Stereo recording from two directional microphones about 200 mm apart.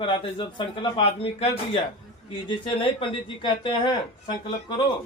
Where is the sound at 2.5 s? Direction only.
25° left (ahead or behind).